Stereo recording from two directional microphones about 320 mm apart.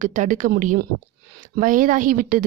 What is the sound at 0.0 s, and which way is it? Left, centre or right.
Speech, right.